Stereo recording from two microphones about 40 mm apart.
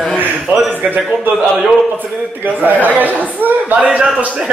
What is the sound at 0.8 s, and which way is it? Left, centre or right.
Speech, right.